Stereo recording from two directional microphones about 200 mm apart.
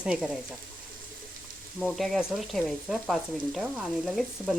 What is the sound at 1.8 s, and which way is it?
Speech, centre (ahead or behind).